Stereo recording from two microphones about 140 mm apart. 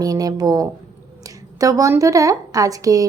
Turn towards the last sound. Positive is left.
turn(degrees=-25)  # may be behind; listen again after turning